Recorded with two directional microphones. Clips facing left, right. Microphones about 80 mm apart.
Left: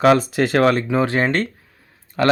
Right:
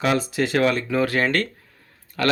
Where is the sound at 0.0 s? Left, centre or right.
Left.